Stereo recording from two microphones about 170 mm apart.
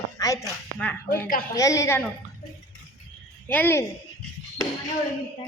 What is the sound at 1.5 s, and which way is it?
Speech, 20° left (ahead or behind).